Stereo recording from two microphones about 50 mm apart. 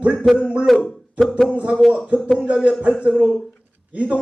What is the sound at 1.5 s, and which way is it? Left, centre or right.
Speech, right.